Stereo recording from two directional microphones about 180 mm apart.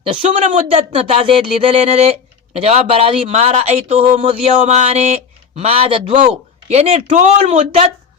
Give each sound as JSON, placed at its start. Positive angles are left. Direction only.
{"t": 0.0, "sound": "speech", "side_deg": -30}